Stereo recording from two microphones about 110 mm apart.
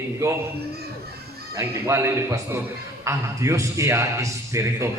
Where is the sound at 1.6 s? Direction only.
25° right (ahead or behind).